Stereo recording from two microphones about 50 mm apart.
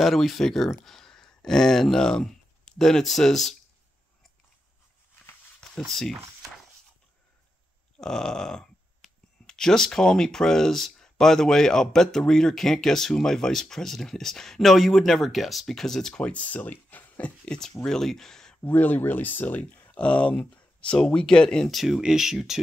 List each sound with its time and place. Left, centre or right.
0.0 s speech: centre
5.9 s speech: centre
8.0 s speech: centre
15.7 s speech: centre
16.2 s speech: left
17.5 s speech: centre
18.6 s speech: left; by 21.6 s centre
21.6 s speech: centre